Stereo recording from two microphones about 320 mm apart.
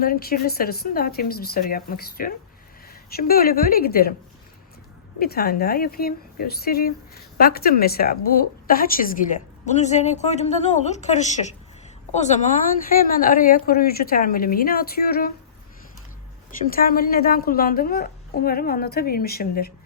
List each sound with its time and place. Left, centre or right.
0.0 s speech: left
5.2 s speech: left
16.7 s speech: left